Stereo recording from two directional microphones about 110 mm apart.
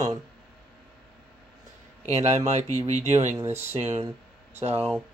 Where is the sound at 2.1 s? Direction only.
90° right.